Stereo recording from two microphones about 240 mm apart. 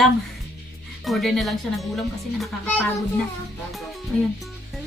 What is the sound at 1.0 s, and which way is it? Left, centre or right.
Speech, centre.